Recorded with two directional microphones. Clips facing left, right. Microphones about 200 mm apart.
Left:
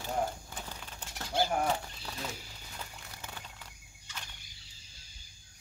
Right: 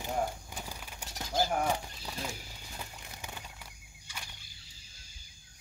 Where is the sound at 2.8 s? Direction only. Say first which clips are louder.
Right 1 dB; 15° right (ahead or behind).